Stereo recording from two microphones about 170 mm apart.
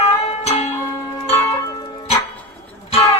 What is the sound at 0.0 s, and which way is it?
Music, 40° left (ahead or behind).